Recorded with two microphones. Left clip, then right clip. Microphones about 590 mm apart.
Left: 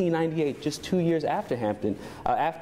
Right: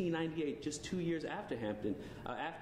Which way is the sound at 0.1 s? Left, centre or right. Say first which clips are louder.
Left 12 dB; left.